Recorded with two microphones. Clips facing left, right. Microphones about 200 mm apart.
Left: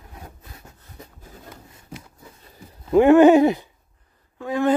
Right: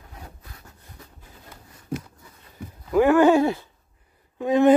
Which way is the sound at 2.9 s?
25° left (ahead or behind).